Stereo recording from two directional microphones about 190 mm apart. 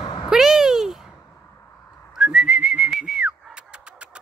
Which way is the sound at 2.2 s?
5° right (ahead or behind).